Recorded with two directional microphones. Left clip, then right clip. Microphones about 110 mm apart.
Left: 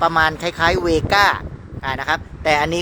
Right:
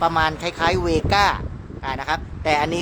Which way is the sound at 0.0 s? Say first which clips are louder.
Left 3 dB; 20° left (ahead or behind).